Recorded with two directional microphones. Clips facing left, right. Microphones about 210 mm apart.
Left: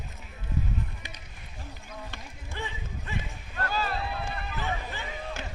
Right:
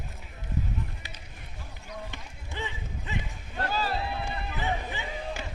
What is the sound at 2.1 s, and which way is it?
Run, 20° right (ahead or behind).